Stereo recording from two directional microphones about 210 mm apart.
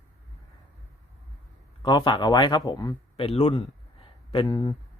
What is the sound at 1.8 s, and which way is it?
Speech, 20° left (ahead or behind).